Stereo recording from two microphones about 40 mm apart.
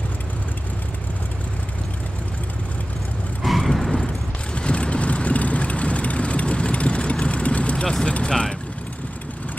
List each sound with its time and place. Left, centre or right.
3.4 s vehicle: centre
4.6 s vehicle: left